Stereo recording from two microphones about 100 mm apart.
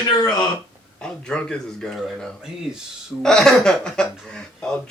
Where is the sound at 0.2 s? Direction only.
45° left (ahead or behind).